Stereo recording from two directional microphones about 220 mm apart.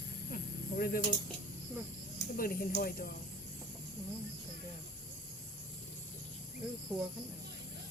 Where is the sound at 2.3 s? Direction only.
40° left (ahead or behind).